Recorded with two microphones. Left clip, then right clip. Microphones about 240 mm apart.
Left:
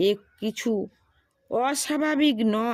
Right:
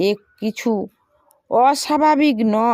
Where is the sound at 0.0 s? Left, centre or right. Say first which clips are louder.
Right 4 dB; centre.